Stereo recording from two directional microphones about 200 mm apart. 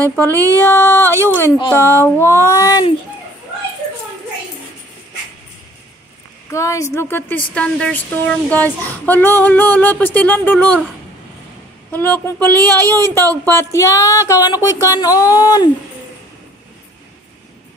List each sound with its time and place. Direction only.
0.0 s a woman's voice: 10° left (ahead or behind)
6.5 s a woman's voice: 15° left (ahead or behind)
11.9 s a woman's voice: 10° left (ahead or behind)